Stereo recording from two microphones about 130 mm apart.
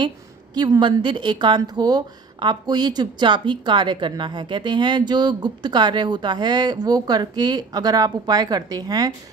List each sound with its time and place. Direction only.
0.6 s speech: 35° right (ahead or behind)